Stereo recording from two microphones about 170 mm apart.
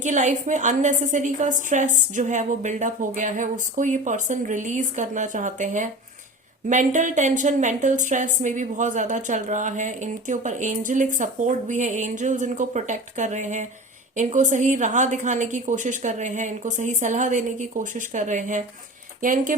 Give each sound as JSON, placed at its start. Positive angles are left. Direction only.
{"t": 0.0, "sound": "speech", "side_deg": -45}